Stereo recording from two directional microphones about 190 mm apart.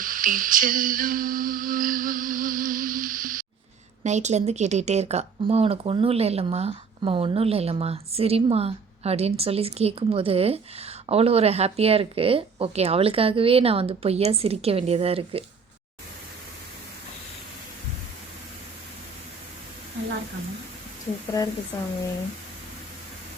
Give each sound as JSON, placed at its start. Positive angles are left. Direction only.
{"t": 0.0, "sound": "humming", "side_deg": -45}
{"t": 4.0, "sound": "speech", "side_deg": -35}
{"t": 21.3, "sound": "speech", "side_deg": 20}